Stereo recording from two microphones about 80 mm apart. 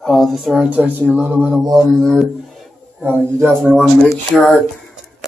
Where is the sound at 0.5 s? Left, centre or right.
Centre.